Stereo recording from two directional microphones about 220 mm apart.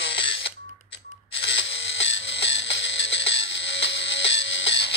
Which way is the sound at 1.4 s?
55° left (ahead or behind).